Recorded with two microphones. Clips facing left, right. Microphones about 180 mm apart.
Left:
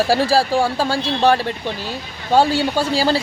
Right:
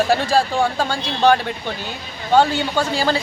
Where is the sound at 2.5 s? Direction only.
35° left (ahead or behind).